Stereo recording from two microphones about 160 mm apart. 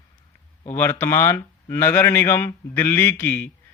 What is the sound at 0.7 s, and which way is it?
Speech, 15° left (ahead or behind).